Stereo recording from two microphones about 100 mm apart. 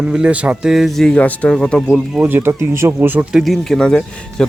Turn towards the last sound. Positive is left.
turn(degrees=5)  # may be behind; listen again after turning